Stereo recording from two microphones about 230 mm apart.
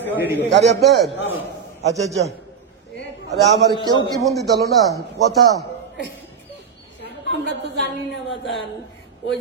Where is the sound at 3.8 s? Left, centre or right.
Centre.